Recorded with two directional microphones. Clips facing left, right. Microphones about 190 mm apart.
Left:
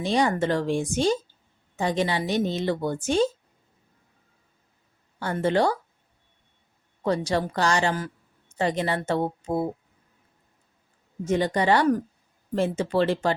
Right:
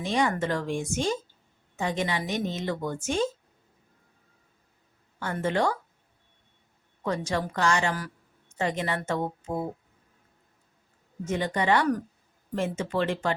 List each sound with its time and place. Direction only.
0.0 s a woman's voice: 35° left (ahead or behind)
5.2 s a woman's voice: 35° left (ahead or behind)
7.0 s a woman's voice: 35° left (ahead or behind)
11.3 s a woman's voice: 35° left (ahead or behind)